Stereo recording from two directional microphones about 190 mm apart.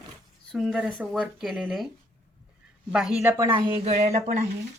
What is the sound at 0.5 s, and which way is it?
Speech, 5° right (ahead or behind).